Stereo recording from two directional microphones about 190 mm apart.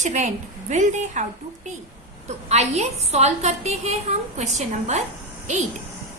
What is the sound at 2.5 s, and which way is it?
A woman's voice, 35° right (ahead or behind).